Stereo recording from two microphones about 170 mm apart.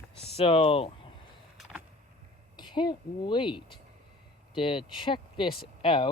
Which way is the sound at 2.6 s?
25° left (ahead or behind).